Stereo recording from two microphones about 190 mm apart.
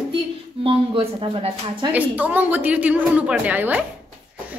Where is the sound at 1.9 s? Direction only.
10° right (ahead or behind).